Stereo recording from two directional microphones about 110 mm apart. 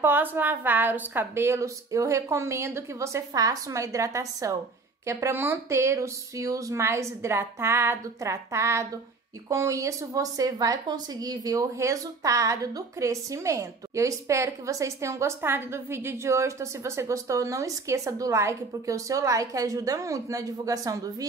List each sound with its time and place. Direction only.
0.0 s speech: 20° right (ahead or behind)